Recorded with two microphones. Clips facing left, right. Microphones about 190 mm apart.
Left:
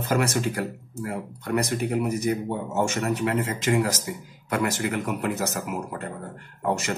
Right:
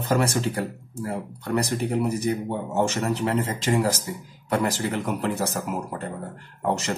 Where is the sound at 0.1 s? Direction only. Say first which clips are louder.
Right 1 dB; 30° right (ahead or behind).